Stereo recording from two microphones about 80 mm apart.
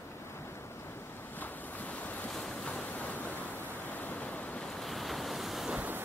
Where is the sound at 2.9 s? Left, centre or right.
Left.